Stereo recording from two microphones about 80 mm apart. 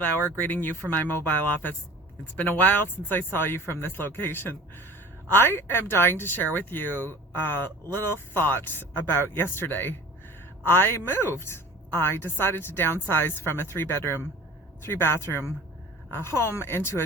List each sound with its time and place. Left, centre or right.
0.3 s speech: left